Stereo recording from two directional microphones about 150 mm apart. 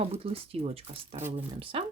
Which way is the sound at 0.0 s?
40° right (ahead or behind).